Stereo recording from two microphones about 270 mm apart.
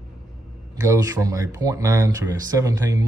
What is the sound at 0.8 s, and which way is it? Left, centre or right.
Speech, centre.